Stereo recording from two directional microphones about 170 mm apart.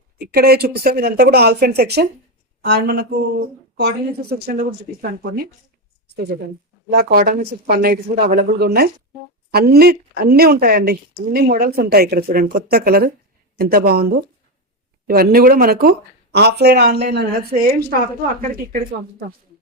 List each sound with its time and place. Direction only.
0.2 s speech: 65° right (ahead or behind)
6.9 s speech: 60° right (ahead or behind)